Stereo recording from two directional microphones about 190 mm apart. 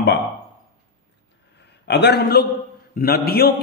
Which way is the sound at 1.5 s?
60° left (ahead or behind).